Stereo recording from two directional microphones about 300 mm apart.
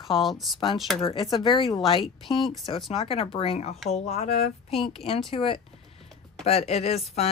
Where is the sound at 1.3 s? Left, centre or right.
Centre.